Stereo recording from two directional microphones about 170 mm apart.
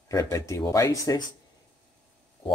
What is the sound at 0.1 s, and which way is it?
Speech, 20° left (ahead or behind).